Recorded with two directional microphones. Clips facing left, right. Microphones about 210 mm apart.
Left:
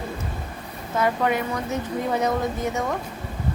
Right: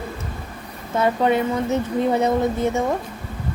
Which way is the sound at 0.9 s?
25° right (ahead or behind).